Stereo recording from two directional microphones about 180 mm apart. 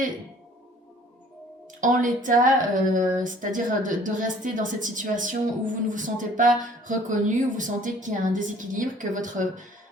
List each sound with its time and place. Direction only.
1.8 s speech: 45° right (ahead or behind)